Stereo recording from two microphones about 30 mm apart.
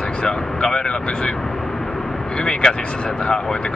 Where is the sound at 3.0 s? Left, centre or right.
Left.